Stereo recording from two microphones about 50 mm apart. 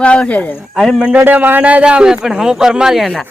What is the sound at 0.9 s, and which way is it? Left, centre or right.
Speech, centre.